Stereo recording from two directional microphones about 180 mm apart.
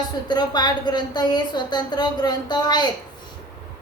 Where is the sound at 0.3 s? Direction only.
25° left (ahead or behind).